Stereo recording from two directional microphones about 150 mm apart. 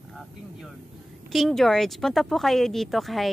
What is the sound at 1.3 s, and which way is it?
Speech, centre (ahead or behind).